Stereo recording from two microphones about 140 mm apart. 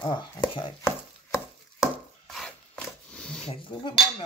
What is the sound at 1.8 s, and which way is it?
Chopping, centre (ahead or behind).